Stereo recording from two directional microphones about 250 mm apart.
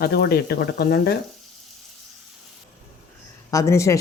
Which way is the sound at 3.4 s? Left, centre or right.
Centre.